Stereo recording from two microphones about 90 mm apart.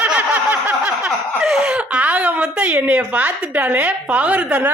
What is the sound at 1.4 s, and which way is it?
A woman's voice, 5° right (ahead or behind).